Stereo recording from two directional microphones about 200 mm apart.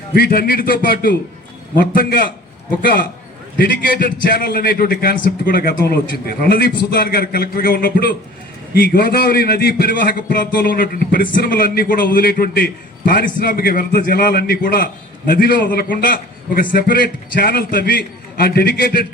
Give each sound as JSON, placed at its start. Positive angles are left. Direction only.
{"t": 0.1, "sound": "a man's voice", "side_deg": 50}